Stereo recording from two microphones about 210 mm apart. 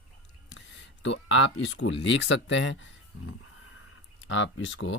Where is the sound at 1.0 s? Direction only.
60° left (ahead or behind).